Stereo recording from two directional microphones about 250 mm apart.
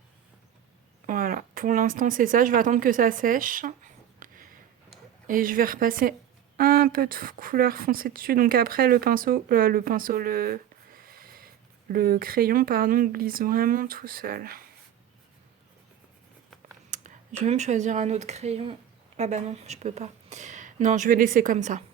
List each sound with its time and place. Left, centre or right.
1.0 s speech: right
16.9 s speech: right